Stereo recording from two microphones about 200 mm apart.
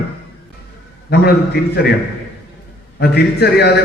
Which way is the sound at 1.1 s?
55° left (ahead or behind).